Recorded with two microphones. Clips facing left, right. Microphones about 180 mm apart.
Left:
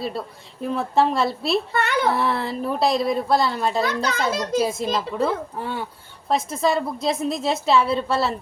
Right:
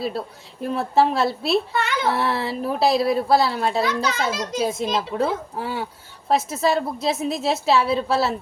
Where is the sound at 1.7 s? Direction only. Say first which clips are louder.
Left 2 dB; 60° left (ahead or behind).